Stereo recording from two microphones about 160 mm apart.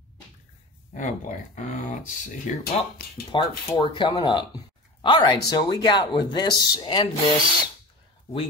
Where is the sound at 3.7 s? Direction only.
20° left (ahead or behind).